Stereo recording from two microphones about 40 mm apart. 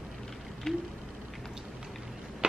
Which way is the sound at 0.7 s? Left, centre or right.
Centre.